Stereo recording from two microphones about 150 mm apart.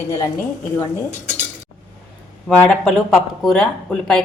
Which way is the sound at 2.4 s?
10° left (ahead or behind).